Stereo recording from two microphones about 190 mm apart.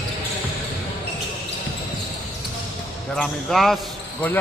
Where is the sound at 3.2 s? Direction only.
Centre (ahead or behind).